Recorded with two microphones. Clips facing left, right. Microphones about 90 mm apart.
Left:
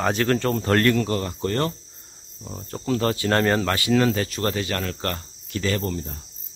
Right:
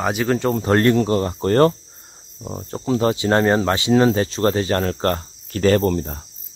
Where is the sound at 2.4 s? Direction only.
30° right (ahead or behind).